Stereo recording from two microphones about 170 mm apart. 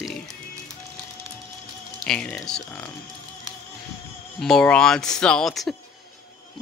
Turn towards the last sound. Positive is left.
turn(degrees=0)  # may be behind; listen again after turning